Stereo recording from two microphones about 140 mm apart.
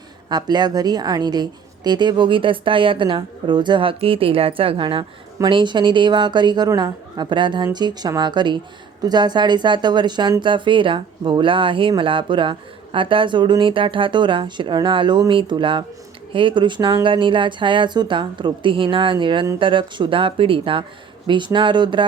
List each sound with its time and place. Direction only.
0.3 s speech: 30° right (ahead or behind)